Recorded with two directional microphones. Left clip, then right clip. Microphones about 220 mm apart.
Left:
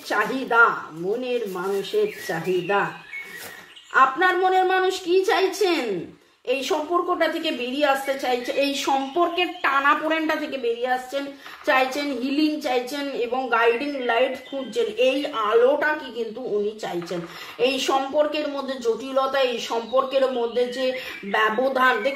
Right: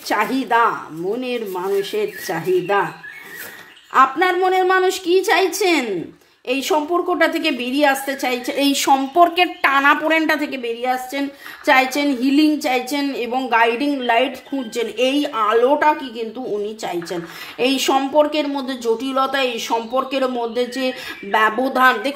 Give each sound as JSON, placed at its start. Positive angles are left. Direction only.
{"t": 0.1, "sound": "a woman's voice", "side_deg": -50}
{"t": 3.9, "sound": "a woman's voice", "side_deg": -50}
{"t": 17.6, "sound": "a woman's voice", "side_deg": -50}